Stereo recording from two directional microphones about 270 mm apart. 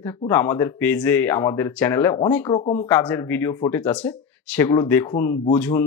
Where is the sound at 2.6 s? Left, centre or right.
Left.